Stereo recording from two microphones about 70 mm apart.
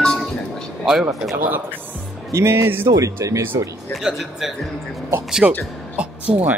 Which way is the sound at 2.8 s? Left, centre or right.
Right.